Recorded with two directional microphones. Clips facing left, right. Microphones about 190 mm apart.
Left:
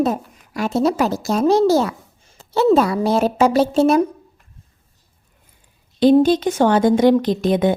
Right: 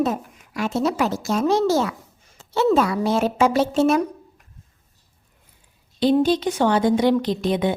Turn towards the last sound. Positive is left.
turn(degrees=45)  # may be behind; listen again after turning